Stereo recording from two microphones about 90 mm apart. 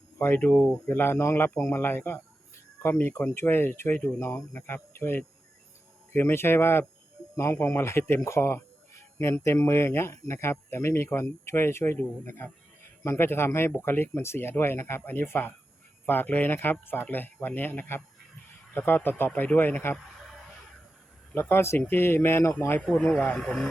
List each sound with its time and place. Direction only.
0.2 s speech: 25° left (ahead or behind)
0.4 s speech: 5° left (ahead or behind)
0.9 s speech: 25° left (ahead or behind)
21.3 s speech: 30° left (ahead or behind)
22.8 s speech: 5° left (ahead or behind)
23.2 s speech: 15° left (ahead or behind)